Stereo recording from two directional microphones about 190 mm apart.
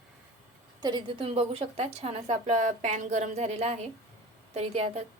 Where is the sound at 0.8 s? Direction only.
25° right (ahead or behind).